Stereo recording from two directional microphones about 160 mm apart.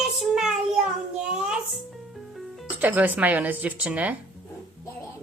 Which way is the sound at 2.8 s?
10° right (ahead or behind).